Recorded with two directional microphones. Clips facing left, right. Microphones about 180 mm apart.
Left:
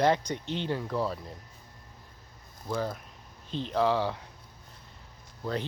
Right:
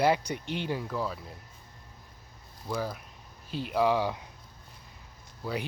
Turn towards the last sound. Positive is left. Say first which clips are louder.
# left 1 dB
turn(degrees=-10)  # may be behind; listen again after turning